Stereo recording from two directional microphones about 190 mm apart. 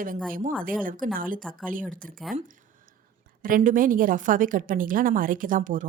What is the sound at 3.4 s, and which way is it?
A woman's voice, 45° right (ahead or behind).